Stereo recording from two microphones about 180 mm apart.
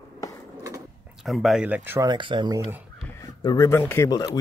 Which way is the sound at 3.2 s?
20° left (ahead or behind).